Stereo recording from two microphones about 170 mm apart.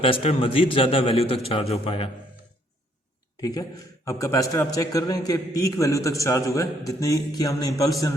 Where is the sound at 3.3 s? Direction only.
20° left (ahead or behind).